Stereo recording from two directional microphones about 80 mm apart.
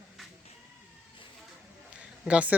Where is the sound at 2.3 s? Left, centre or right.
Centre.